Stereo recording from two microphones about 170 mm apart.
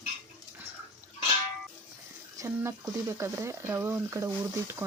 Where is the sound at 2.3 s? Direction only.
15° right (ahead or behind).